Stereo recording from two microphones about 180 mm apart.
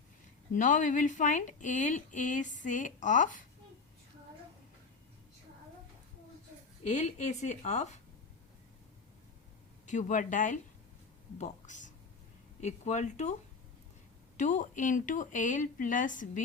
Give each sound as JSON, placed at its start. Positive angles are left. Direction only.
{"t": 0.5, "sound": "speech", "side_deg": 45}
{"t": 6.8, "sound": "a woman's voice", "side_deg": 40}
{"t": 9.8, "sound": "a woman's voice", "side_deg": 45}
{"t": 14.3, "sound": "speech", "side_deg": 45}